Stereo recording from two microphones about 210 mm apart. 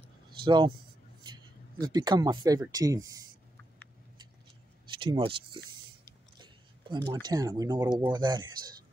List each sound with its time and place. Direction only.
0.5 s speech: 20° right (ahead or behind)
4.9 s speech: 25° right (ahead or behind)